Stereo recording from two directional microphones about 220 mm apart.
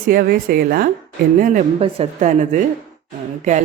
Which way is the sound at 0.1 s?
40° right (ahead or behind).